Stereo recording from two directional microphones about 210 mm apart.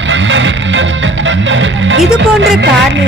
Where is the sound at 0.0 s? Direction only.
60° right (ahead or behind).